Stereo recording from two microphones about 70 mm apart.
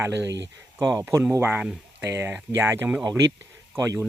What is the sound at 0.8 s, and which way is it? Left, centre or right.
Speech, right.